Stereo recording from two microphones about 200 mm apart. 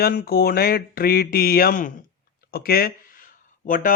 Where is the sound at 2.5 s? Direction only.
50° left (ahead or behind).